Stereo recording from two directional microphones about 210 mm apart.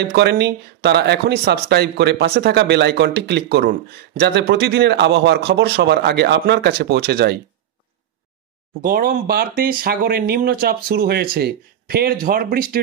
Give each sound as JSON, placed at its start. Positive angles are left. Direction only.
{"t": 0.1, "sound": "speech", "side_deg": -55}
{"t": 8.8, "sound": "speech", "side_deg": -45}